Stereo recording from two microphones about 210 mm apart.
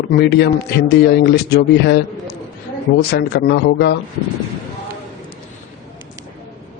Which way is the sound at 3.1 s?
50° left (ahead or behind).